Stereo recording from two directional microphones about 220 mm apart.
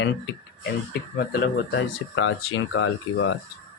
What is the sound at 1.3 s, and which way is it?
Speech, 55° left (ahead or behind).